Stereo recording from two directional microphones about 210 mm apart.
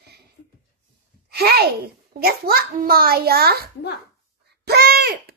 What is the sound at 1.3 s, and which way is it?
A child's voice, 50° right (ahead or behind).